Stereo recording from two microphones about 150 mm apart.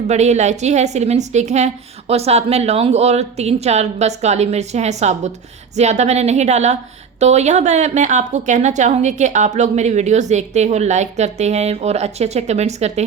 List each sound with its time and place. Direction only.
0.1 s a woman's voice: 50° right (ahead or behind)